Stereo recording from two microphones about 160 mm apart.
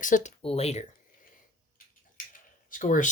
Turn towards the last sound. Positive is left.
turn(degrees=50)  # may be behind; listen again after turning